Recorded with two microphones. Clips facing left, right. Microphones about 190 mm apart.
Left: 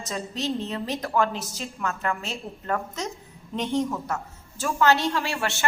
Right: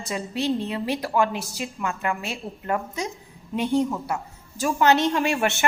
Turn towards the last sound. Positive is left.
turn(degrees=-20)  # may be behind; listen again after turning